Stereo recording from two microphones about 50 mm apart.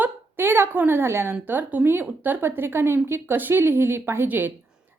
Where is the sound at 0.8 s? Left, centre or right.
Right.